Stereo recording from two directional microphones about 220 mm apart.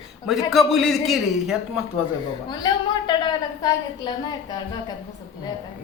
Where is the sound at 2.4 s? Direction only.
20° left (ahead or behind).